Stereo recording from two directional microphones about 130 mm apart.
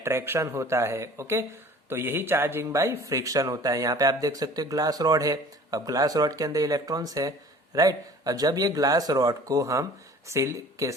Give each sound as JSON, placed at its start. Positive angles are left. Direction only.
{"t": 0.0, "sound": "speech", "side_deg": -20}